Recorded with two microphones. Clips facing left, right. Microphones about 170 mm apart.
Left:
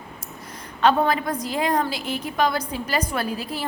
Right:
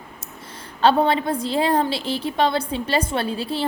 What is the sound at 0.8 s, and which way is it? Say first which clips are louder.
A woman's voice: right 2 dB; 30° right (ahead or behind).